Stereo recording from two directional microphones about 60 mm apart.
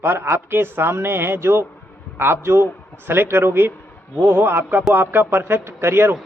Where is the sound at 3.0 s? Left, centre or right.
Right.